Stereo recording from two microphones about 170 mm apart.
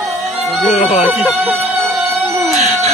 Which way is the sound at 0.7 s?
40° left (ahead or behind).